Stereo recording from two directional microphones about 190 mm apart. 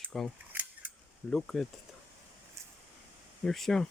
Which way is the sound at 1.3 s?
5° left (ahead or behind).